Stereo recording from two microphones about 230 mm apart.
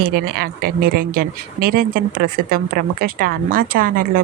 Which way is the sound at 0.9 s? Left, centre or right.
Right.